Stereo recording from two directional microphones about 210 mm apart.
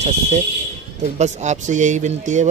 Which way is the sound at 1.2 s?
35° right (ahead or behind).